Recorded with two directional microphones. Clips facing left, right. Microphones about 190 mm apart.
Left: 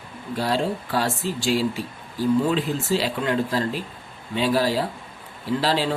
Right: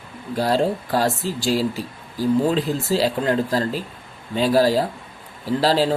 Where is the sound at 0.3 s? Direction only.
40° right (ahead or behind).